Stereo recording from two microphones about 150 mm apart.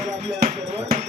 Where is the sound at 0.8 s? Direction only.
50° right (ahead or behind).